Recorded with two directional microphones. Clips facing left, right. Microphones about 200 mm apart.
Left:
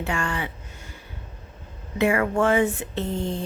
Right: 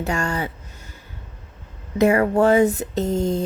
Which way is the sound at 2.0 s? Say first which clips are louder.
Right 5 dB; 40° right (ahead or behind).